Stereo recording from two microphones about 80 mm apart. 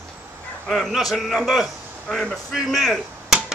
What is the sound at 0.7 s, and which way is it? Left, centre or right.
A man's voice, centre.